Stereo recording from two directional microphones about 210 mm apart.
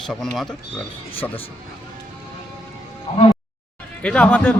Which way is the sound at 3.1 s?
25° left (ahead or behind).